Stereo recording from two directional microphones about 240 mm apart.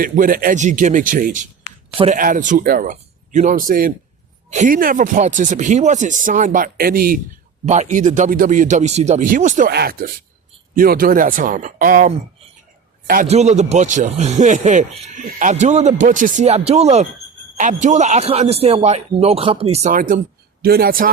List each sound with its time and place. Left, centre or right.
0.0 s speech: right